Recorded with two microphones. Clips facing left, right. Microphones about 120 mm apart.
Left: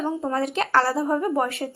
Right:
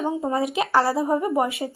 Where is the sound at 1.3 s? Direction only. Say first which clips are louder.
Right 1 dB; 5° right (ahead or behind).